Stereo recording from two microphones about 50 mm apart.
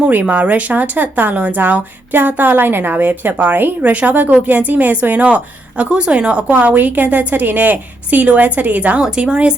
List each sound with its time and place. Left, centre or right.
0.1 s a woman's voice: right
9.0 s a woman's voice: centre